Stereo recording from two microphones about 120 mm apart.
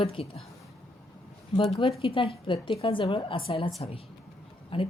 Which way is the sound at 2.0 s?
50° left (ahead or behind).